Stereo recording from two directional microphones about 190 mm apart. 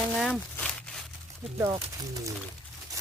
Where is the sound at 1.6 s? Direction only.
15° right (ahead or behind).